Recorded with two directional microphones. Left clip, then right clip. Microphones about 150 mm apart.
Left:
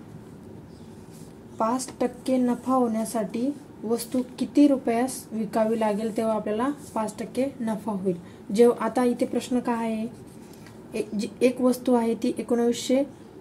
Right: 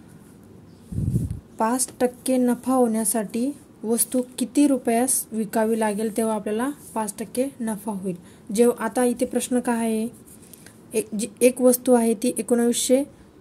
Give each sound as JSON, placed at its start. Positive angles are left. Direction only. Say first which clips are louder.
{"t": 1.6, "sound": "a woman's voice", "louder": "right 3 dB", "side_deg": -70}